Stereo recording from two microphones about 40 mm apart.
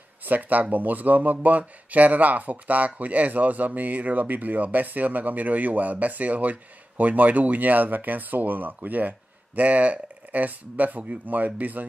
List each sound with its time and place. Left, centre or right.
0.2 s speech: right